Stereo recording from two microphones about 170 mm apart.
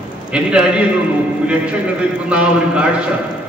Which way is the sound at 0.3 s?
5° right (ahead or behind).